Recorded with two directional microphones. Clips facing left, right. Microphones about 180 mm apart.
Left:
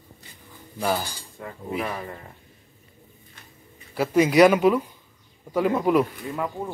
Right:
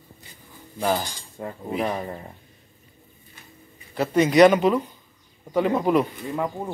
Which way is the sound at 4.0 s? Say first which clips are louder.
Right 1 dB; 10° left (ahead or behind).